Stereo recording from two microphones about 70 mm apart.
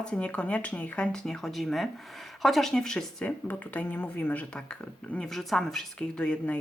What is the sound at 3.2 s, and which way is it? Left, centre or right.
Speech, left.